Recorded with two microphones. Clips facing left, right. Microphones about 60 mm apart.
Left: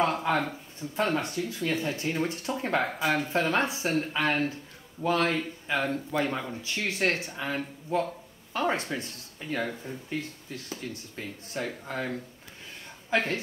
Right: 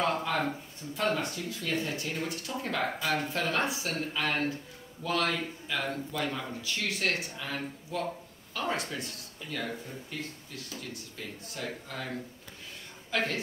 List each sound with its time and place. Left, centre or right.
0.0 s speech: left
2.8 s speech: centre
13.1 s speech: left